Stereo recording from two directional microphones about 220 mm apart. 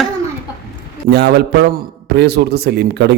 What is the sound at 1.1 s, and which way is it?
A man's voice, 50° right (ahead or behind).